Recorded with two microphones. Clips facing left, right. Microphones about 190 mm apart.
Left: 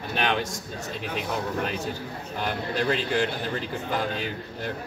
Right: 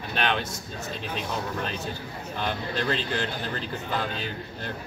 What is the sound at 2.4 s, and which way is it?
Speech, 10° left (ahead or behind).